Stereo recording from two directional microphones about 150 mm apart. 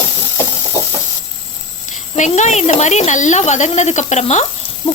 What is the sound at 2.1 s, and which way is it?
Speech, 50° left (ahead or behind).